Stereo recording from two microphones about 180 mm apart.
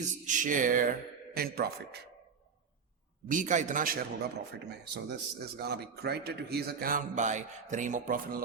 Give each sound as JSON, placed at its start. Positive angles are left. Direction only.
{"t": 0.0, "sound": "a man's voice", "side_deg": -45}
{"t": 1.3, "sound": "a man's voice", "side_deg": -60}
{"t": 3.2, "sound": "a man's voice", "side_deg": -45}